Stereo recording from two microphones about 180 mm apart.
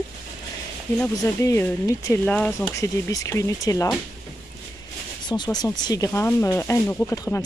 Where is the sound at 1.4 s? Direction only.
15° left (ahead or behind).